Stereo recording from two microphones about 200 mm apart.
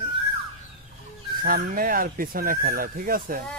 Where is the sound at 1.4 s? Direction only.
45° right (ahead or behind).